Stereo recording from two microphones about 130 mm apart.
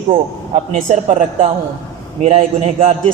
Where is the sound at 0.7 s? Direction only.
65° right (ahead or behind).